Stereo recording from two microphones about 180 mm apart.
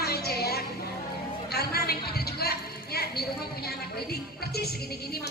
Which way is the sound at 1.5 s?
60° left (ahead or behind).